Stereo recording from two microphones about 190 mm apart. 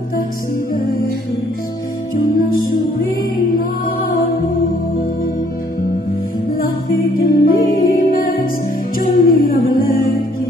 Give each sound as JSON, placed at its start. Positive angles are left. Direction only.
{"t": 7.2, "sound": "music", "side_deg": 50}